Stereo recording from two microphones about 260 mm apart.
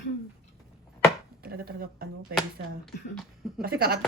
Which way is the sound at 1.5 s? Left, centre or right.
Right.